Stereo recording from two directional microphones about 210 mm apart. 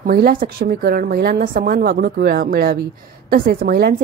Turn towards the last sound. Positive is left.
turn(degrees=-45)  # may be behind; listen again after turning